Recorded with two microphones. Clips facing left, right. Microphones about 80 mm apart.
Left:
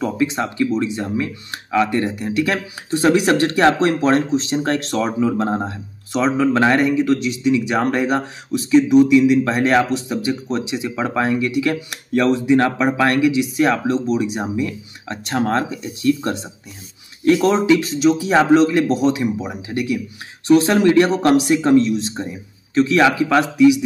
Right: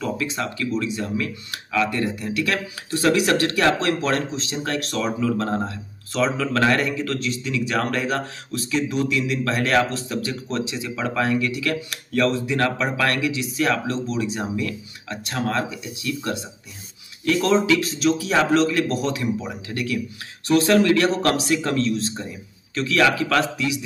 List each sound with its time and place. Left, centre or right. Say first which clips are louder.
0.0 s speech: left 6 dB; left
17.4 s speech: left 4 dB; left